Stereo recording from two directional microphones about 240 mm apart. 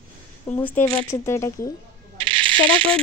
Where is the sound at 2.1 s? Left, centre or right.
Right.